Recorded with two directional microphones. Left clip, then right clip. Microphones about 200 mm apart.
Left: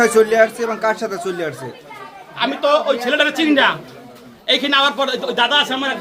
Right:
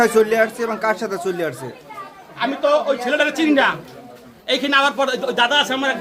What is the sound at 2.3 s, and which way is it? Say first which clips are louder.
A man's voice: left 1 dB; 5° left (ahead or behind).